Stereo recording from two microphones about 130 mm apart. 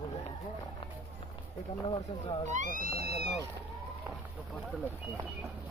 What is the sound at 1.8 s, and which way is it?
Speech, 40° left (ahead or behind).